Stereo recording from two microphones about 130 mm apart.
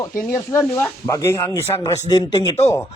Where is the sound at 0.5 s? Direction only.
20° left (ahead or behind).